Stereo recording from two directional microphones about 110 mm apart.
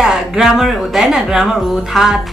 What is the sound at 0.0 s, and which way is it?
Speech, 5° right (ahead or behind).